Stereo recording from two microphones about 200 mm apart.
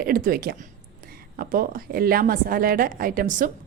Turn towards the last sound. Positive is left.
turn(degrees=-40)  # may be behind; listen again after turning